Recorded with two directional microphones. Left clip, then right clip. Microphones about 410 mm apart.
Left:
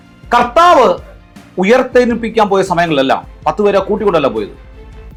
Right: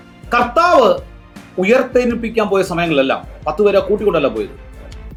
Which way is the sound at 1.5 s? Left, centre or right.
Left.